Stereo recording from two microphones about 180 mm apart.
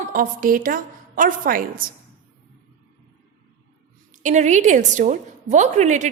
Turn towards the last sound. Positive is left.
turn(degrees=-40)  # may be behind; listen again after turning